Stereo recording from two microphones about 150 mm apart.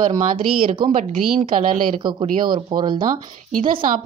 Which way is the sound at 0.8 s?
40° right (ahead or behind).